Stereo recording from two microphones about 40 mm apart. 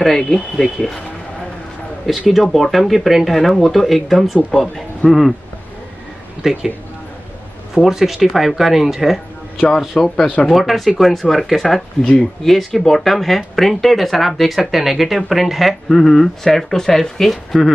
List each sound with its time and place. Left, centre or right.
0.0 s speech: centre
2.0 s speech: centre
6.4 s speech: centre
7.7 s speech: centre
9.7 s speech: centre
10.2 s speech: left
10.5 s speech: centre